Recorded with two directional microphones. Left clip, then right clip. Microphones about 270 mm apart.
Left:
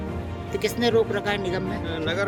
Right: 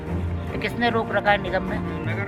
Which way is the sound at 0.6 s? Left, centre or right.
Centre.